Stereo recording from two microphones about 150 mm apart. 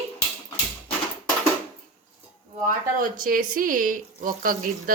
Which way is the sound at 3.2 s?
65° right (ahead or behind).